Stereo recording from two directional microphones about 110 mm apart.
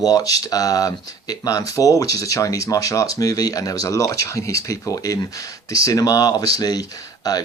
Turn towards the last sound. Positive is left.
turn(degrees=35)  # may be behind; listen again after turning